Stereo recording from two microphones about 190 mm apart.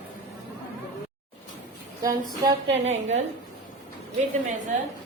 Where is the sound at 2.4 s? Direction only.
35° right (ahead or behind).